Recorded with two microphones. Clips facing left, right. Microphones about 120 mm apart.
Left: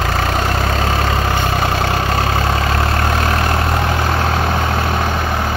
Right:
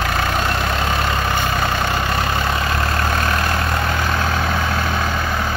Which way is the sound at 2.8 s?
15° left (ahead or behind).